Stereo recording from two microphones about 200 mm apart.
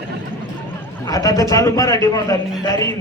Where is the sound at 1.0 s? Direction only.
15° left (ahead or behind).